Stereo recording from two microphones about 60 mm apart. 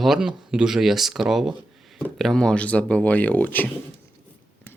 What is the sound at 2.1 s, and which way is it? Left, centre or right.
Speech, centre.